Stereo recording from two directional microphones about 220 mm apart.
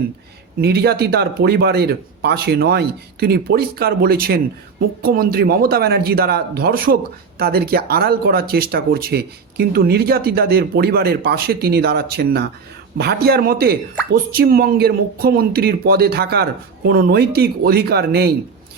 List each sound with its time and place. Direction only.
0.6 s speech: 45° right (ahead or behind)